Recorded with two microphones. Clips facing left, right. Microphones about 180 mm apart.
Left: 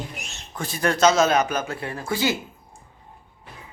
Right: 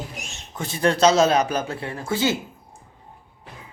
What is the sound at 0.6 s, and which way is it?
A man's voice, 25° right (ahead or behind).